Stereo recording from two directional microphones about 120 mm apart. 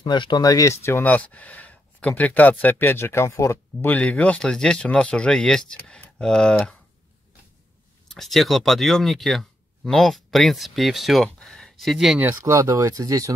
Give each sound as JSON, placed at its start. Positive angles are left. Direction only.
{"t": 0.0, "sound": "speech", "side_deg": 40}
{"t": 3.8, "sound": "speech", "side_deg": 10}
{"t": 8.1, "sound": "speech", "side_deg": 0}
{"t": 12.2, "sound": "speech", "side_deg": -20}